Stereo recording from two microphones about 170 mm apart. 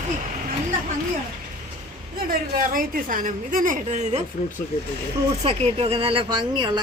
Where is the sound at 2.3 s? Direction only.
55° right (ahead or behind).